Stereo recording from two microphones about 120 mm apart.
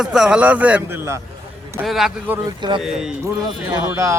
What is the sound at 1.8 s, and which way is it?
Speech, centre (ahead or behind).